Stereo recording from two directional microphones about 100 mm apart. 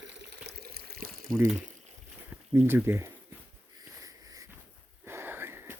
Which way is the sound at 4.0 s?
35° right (ahead or behind).